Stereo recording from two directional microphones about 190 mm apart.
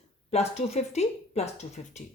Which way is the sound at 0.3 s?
35° left (ahead or behind).